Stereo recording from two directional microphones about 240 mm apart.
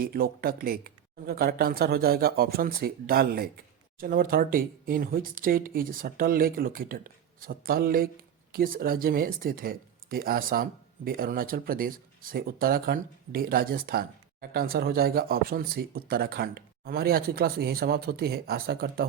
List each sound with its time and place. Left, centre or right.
0.0 s speech: right